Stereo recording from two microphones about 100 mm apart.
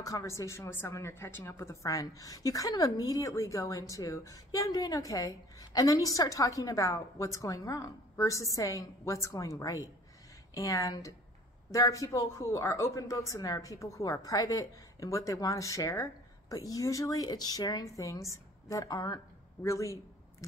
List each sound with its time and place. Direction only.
0.0 s a woman's voice: 30° left (ahead or behind)